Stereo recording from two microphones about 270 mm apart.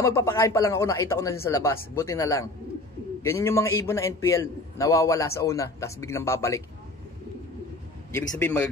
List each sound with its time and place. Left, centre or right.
0.0 s a man's voice: centre
8.1 s a man's voice: centre